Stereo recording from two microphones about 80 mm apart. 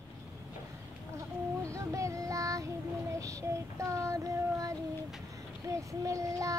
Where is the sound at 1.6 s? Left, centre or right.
Right.